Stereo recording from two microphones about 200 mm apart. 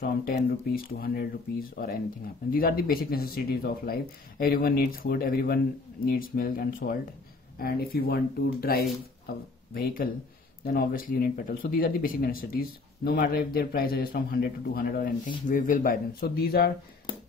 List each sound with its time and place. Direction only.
0.0 s speech: 50° left (ahead or behind)
10.6 s speech: 45° left (ahead or behind)